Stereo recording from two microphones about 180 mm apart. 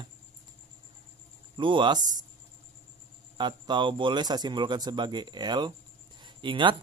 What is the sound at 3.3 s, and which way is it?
Speech, 25° right (ahead or behind).